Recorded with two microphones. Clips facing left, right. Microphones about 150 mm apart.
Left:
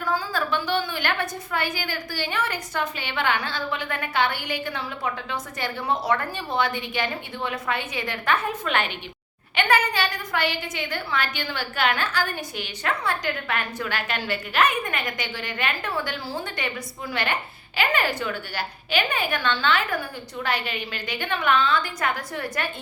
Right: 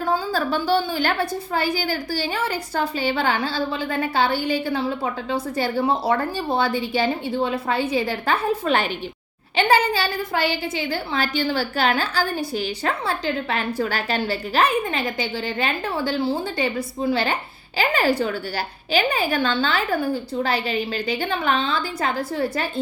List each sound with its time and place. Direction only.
0.0 s a woman's voice: 30° right (ahead or behind)